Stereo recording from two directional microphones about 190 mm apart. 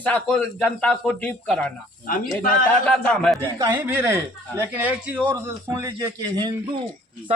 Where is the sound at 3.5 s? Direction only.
15° right (ahead or behind).